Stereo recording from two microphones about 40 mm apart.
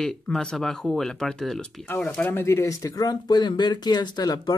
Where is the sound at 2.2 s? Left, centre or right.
Left.